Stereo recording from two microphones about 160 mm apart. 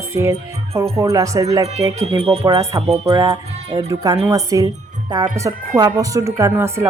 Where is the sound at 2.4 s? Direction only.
20° right (ahead or behind).